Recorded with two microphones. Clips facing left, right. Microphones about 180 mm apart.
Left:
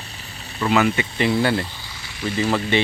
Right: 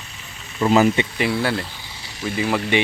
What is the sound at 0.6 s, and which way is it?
Speech, 35° right (ahead or behind).